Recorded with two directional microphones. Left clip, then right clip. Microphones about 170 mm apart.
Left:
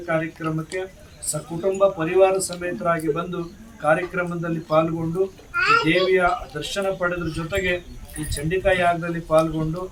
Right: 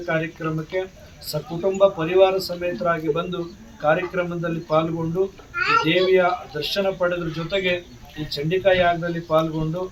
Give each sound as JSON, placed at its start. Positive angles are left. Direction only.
{"t": 0.0, "sound": "speech", "side_deg": 0}